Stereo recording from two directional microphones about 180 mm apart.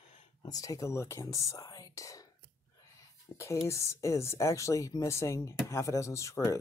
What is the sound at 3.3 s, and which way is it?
Speech, 15° left (ahead or behind).